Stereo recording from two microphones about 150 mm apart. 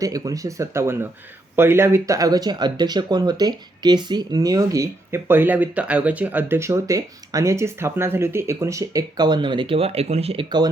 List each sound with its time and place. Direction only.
0.0 s speech: 25° right (ahead or behind); by 10.4 s 40° right (ahead or behind)